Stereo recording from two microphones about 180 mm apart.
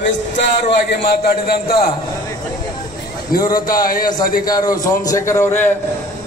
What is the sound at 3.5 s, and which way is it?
Speech, 50° left (ahead or behind).